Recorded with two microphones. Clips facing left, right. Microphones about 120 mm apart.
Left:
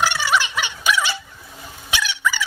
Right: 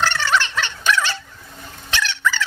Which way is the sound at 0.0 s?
10° left (ahead or behind).